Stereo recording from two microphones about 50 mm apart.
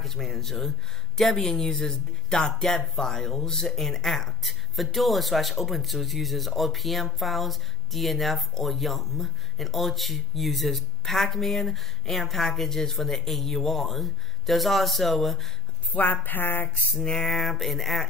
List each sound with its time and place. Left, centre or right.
0.0 s speech: centre
15.9 s a woman's voice: left
17.0 s speech: centre
17.3 s speech: centre